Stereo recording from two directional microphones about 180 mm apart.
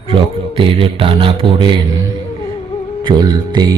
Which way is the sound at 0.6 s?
30° right (ahead or behind).